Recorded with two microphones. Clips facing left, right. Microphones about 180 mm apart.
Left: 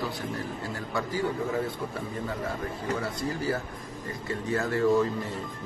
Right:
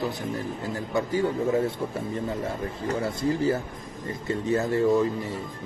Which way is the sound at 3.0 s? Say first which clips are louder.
Right 6 dB; 25° right (ahead or behind).